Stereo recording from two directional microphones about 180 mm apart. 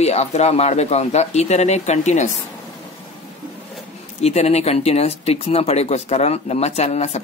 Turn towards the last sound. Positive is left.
turn(degrees=40)  # may be behind; listen again after turning